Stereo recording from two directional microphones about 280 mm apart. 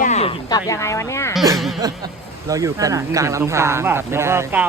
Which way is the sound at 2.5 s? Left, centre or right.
Centre.